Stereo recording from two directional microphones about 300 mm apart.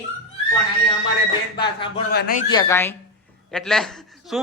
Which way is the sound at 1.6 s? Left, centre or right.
Centre.